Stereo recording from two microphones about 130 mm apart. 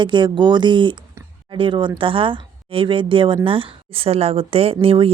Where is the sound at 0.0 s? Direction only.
35° right (ahead or behind).